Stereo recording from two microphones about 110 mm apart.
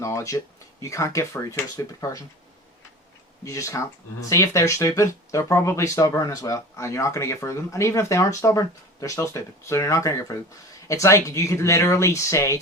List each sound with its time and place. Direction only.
0.0 s speech: 30° left (ahead or behind)
3.4 s speech: 30° left (ahead or behind)